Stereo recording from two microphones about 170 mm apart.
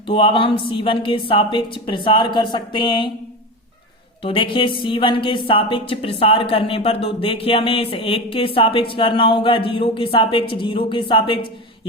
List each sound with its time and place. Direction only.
0.1 s a woman's voice: 30° left (ahead or behind)
4.2 s a woman's voice: 30° left (ahead or behind)